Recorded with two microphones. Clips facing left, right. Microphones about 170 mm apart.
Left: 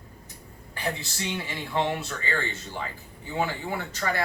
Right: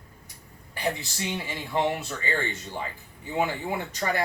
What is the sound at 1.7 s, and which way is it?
Speech, 15° right (ahead or behind).